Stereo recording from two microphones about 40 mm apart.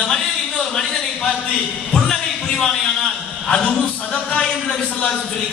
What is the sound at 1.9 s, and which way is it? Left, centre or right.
Music, centre.